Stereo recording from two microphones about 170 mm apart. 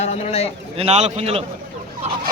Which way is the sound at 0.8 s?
40° right (ahead or behind).